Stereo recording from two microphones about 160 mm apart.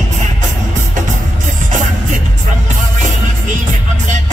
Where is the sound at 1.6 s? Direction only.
55° right (ahead or behind).